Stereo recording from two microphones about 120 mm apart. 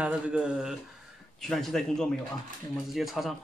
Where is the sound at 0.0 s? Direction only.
10° right (ahead or behind).